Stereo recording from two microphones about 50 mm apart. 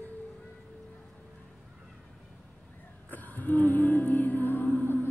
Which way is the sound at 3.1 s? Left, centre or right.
Left.